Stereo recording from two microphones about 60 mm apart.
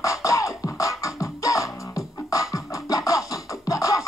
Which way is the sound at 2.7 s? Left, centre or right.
Left.